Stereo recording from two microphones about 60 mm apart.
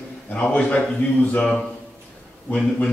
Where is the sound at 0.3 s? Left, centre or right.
Left.